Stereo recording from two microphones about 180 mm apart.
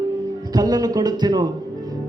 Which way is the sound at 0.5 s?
20° right (ahead or behind).